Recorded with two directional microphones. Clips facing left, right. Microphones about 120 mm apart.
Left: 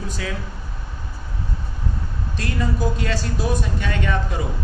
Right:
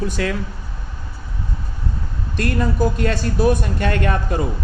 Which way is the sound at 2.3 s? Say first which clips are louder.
Right 5 dB; 55° right (ahead or behind).